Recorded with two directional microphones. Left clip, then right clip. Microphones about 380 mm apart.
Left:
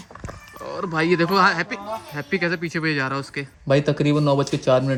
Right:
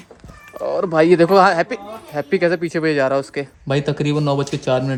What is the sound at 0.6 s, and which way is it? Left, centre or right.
Speech, right.